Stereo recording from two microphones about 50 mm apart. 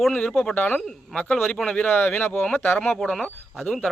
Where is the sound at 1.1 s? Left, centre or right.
Centre.